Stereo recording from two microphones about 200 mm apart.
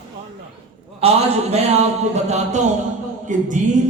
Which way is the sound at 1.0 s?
30° right (ahead or behind).